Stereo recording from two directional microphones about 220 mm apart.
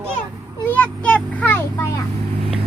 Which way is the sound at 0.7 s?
5° left (ahead or behind).